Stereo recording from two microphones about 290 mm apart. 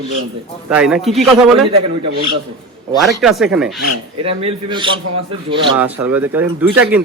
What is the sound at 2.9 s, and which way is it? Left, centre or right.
Speech, centre.